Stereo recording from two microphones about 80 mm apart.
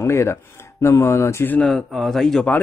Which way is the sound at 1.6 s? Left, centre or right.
Centre.